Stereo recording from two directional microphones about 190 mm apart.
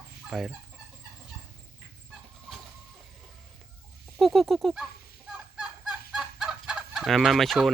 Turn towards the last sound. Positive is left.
turn(degrees=0)  # may be behind; listen again after turning